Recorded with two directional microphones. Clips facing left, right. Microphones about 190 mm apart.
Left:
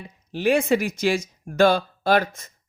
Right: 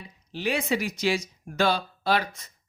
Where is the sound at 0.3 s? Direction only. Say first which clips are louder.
Left 7 dB; 50° left (ahead or behind).